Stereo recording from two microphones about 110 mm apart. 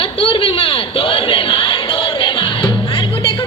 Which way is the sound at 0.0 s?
55° left (ahead or behind).